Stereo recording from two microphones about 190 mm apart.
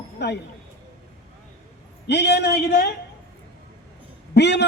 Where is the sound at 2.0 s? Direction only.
60° left (ahead or behind).